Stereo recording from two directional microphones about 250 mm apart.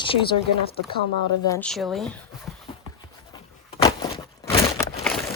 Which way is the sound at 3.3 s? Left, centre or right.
Centre.